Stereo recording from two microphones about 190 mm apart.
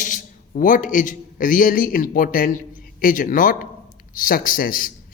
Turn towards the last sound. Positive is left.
turn(degrees=50)  # may be behind; listen again after turning